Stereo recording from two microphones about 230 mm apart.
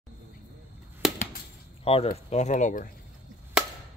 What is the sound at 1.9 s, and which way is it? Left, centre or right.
Speech, left.